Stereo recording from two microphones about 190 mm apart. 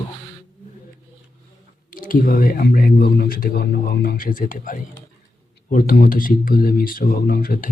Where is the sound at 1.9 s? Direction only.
45° left (ahead or behind).